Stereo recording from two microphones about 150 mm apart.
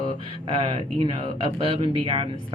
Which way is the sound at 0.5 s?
35° right (ahead or behind).